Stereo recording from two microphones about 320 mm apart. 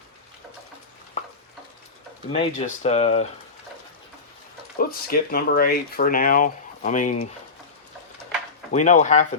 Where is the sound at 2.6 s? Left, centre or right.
Centre.